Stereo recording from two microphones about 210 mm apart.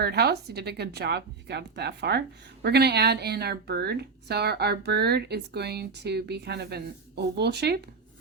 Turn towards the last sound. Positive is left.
turn(degrees=-50)  # may be behind; listen again after turning